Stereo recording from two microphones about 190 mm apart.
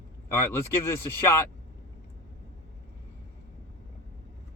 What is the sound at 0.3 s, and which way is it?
Speech, 15° left (ahead or behind).